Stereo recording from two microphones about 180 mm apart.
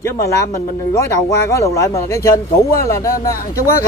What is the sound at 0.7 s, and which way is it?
Speech, 15° left (ahead or behind).